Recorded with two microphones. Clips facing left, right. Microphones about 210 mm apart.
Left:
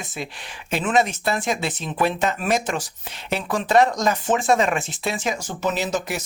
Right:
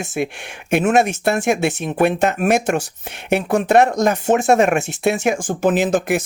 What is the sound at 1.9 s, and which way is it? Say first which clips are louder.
Speech: right 4 dB; 55° right (ahead or behind).